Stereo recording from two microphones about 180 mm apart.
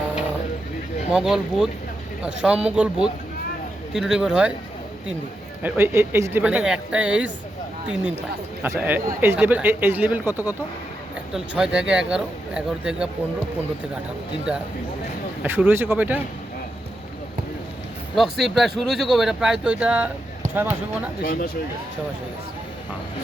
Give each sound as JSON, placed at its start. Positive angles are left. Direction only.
{"t": 1.1, "sound": "speech", "side_deg": -5}
{"t": 5.6, "sound": "speech", "side_deg": -10}
{"t": 8.6, "sound": "speech", "side_deg": -10}
{"t": 15.4, "sound": "speech", "side_deg": -10}
{"t": 18.1, "sound": "speech", "side_deg": 0}
{"t": 21.2, "sound": "speech", "side_deg": 55}